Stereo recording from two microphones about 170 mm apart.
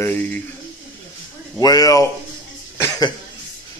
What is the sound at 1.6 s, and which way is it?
Speech, 20° left (ahead or behind).